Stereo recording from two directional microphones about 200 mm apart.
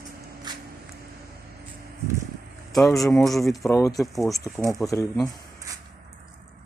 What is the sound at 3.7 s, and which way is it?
Speech, 15° left (ahead or behind).